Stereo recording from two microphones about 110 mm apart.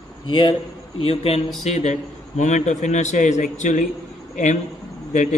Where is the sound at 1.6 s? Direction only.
90° left.